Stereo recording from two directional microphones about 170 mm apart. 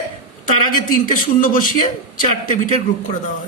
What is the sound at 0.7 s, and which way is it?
A man's voice, 55° left (ahead or behind).